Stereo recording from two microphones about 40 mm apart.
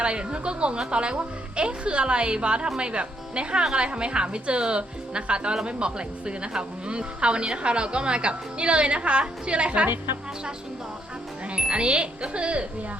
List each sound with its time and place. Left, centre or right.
0.0 s a woman's voice: right
11.5 s a woman's voice: right